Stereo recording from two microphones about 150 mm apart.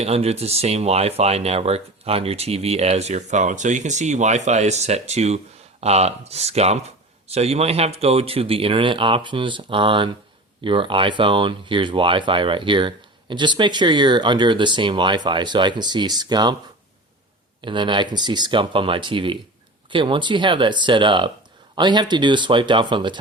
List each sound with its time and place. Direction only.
0.0 s speech: 45° right (ahead or behind); by 16.6 s 30° right (ahead or behind)
17.6 s speech: 35° right (ahead or behind)